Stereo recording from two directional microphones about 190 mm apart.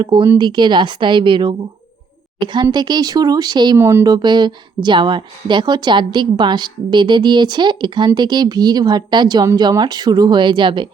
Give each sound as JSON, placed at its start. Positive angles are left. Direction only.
{"t": 0.0, "sound": "speech", "side_deg": -25}